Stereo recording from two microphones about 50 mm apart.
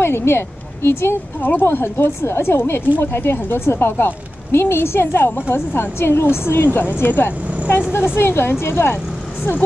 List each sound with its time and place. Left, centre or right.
0.0 s speech: left